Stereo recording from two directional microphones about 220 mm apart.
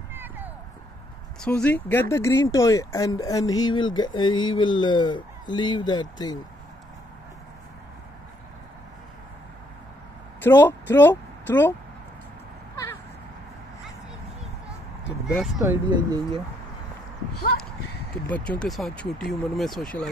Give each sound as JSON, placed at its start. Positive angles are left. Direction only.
{"t": 0.1, "sound": "a sound", "side_deg": -10}
{"t": 1.4, "sound": "speech", "side_deg": 5}
{"t": 10.4, "sound": "speech", "side_deg": 10}
{"t": 15.3, "sound": "speech", "side_deg": 0}
{"t": 15.6, "sound": "speech", "side_deg": -15}
{"t": 18.3, "sound": "speech", "side_deg": 5}